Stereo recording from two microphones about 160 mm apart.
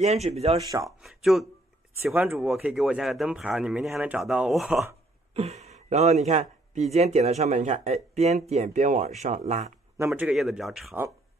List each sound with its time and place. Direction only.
0.0 s speech: 40° right (ahead or behind)
0.8 s speech: centre (ahead or behind)
5.3 s a sound: 40° right (ahead or behind)
6.9 s speech: 40° right (ahead or behind)
9.9 s a man's voice: 15° right (ahead or behind)
10.2 s speech: 5° right (ahead or behind)